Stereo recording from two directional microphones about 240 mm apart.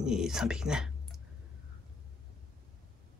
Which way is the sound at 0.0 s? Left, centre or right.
Centre.